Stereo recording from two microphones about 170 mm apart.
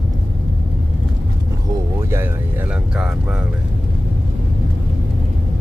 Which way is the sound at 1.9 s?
15° right (ahead or behind).